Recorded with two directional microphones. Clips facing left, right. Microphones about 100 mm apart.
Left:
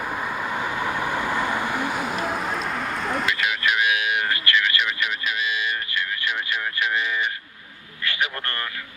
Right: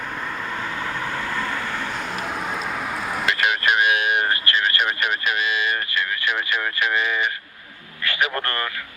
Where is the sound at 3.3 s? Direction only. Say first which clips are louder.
Right 3 dB; 55° right (ahead or behind).